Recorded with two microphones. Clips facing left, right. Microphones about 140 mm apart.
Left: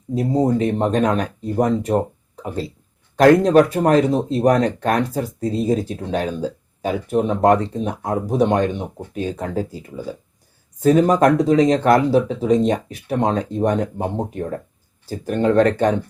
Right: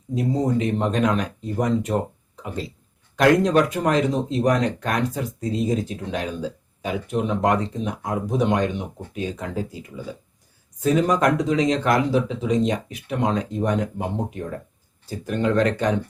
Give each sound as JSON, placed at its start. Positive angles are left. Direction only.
{"t": 0.1, "sound": "speech", "side_deg": 35}